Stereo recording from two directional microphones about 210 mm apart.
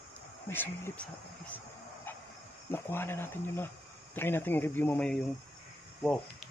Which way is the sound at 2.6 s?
10° left (ahead or behind).